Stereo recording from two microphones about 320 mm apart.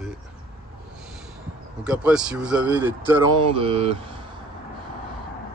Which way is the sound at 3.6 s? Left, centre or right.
Centre.